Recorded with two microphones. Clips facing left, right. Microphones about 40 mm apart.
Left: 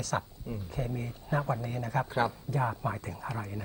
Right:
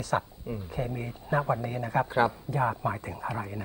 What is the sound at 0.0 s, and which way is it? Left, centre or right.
Speech, centre.